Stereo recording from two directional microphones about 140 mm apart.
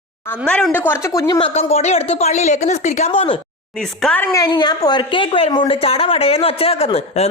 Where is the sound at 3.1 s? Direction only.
40° left (ahead or behind).